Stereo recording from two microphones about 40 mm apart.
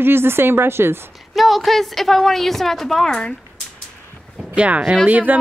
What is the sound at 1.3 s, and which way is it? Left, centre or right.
A woman's voice, centre.